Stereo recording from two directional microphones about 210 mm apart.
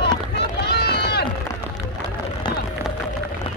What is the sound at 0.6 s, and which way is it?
Run, 50° left (ahead or behind).